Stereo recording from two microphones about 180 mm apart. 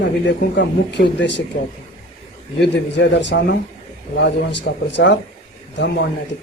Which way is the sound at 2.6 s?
70° left (ahead or behind).